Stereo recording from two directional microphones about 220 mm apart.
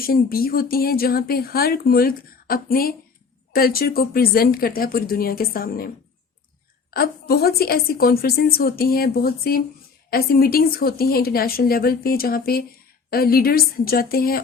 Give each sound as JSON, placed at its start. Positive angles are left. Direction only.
{"t": 0.0, "sound": "speech", "side_deg": 40}
{"t": 6.9, "sound": "speech", "side_deg": 45}